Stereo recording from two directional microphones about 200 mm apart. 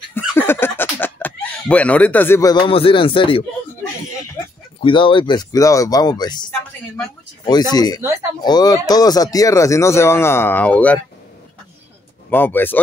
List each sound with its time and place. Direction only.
0.4 s a sound: 10° left (ahead or behind)
2.6 s speech: 25° left (ahead or behind)
4.8 s speech: 25° left (ahead or behind)
8.0 s speech: 15° right (ahead or behind)
8.4 s speech: 20° left (ahead or behind)
12.3 s speech: 10° left (ahead or behind)